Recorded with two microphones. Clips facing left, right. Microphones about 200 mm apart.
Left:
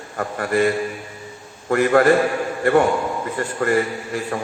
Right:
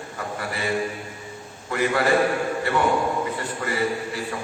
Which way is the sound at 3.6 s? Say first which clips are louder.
Left 10 dB; 55° left (ahead or behind).